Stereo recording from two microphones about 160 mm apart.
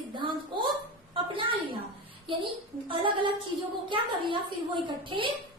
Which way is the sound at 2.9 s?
30° right (ahead or behind).